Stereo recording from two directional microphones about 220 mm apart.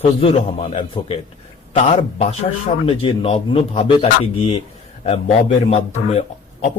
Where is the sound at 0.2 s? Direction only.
25° left (ahead or behind).